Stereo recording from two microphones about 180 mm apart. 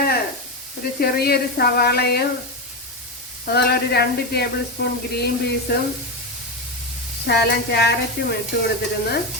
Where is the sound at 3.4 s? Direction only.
60° left (ahead or behind).